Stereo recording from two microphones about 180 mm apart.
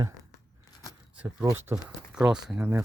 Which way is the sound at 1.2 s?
10° right (ahead or behind).